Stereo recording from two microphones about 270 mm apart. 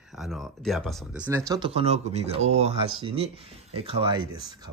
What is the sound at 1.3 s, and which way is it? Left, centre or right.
Speech, centre.